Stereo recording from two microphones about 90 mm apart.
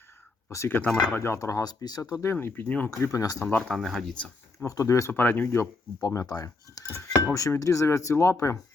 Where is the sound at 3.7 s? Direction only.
Centre (ahead or behind).